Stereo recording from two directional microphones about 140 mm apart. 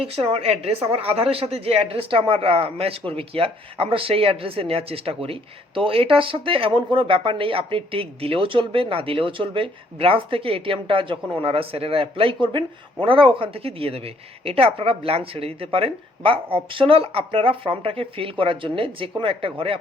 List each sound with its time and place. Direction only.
0.0 s a woman's voice: 45° right (ahead or behind)